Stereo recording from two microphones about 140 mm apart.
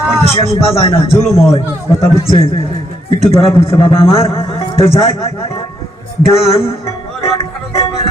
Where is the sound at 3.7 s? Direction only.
40° left (ahead or behind).